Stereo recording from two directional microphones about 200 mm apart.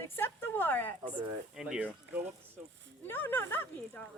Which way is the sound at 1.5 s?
5° right (ahead or behind).